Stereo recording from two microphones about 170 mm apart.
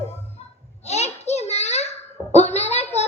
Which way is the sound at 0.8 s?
40° left (ahead or behind).